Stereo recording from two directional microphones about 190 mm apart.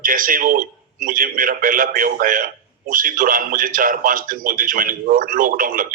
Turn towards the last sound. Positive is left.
turn(degrees=-45)  # may be behind; listen again after turning